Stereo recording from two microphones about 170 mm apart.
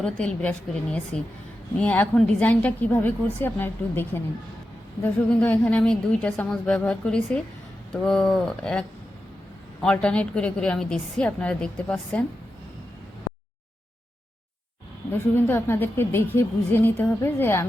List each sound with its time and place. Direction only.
0.0 s a woman's voice: 5° left (ahead or behind)
15.4 s a woman's voice: 10° left (ahead or behind)